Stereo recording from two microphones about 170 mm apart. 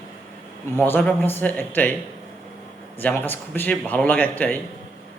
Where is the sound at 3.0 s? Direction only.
10° left (ahead or behind).